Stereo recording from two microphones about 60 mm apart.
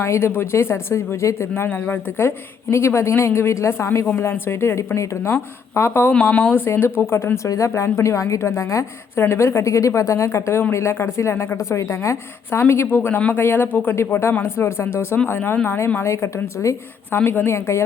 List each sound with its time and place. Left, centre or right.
0.0 s speech: left
1.5 s speech: left
7.4 s a woman's voice: left
7.7 s speech: left
8.0 s a woman's voice: left
12.9 s speech: left
13.9 s speech: left
16.0 s speech: left
17.1 s speech: left